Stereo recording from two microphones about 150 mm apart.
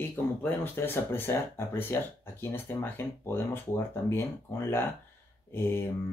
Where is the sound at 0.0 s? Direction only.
15° left (ahead or behind).